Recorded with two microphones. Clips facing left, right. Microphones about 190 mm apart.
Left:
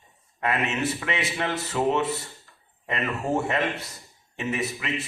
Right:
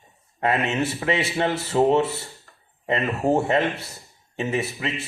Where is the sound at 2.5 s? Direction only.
50° right (ahead or behind).